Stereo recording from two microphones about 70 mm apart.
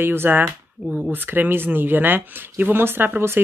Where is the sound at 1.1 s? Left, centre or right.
Right.